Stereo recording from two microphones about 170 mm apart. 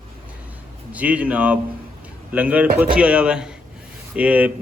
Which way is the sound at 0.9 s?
10° right (ahead or behind).